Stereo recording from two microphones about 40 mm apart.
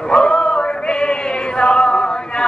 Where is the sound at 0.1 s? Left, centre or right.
Centre.